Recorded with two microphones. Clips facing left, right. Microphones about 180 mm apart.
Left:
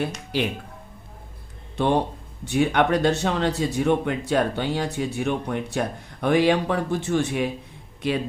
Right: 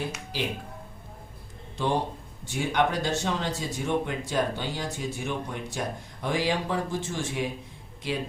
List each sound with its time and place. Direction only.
0.3 s speech: 60° left (ahead or behind)
1.7 s a man's voice: 65° left (ahead or behind)